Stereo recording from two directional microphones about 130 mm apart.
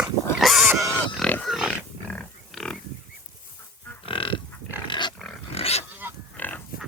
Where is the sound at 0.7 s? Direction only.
25° right (ahead or behind).